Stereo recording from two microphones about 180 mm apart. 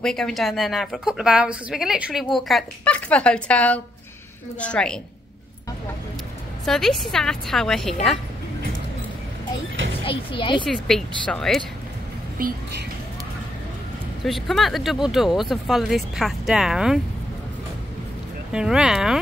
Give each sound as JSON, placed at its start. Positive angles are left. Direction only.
{"t": 0.0, "sound": "a woman's voice", "side_deg": 5}
{"t": 6.6, "sound": "speech", "side_deg": 0}
{"t": 10.0, "sound": "speech", "side_deg": 25}
{"t": 10.7, "sound": "speech", "side_deg": 0}
{"t": 12.4, "sound": "speech", "side_deg": -50}
{"t": 14.2, "sound": "speech", "side_deg": 0}
{"t": 18.5, "sound": "speech", "side_deg": -5}